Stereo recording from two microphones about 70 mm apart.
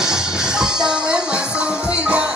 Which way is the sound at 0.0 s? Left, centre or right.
Centre.